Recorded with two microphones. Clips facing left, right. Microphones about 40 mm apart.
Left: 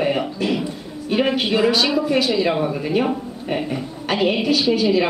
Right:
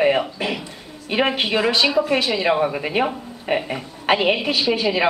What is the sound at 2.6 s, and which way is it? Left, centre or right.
A woman's voice, right.